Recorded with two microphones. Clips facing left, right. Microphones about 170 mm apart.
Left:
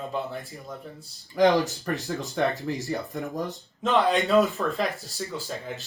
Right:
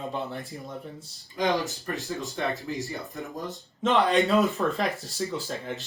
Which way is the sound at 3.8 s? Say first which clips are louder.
Even; centre (ahead or behind).